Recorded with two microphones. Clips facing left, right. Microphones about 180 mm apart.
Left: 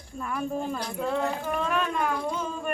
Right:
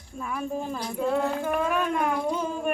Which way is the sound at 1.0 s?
5° right (ahead or behind).